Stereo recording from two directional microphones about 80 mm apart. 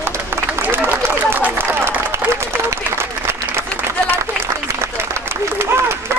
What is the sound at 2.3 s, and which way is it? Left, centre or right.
Applause, right.